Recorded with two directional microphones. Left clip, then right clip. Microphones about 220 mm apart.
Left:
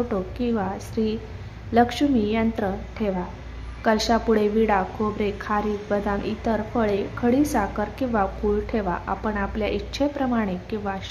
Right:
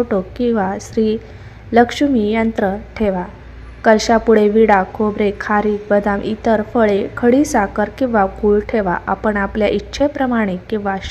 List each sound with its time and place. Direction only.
0.1 s a woman's voice: 20° right (ahead or behind)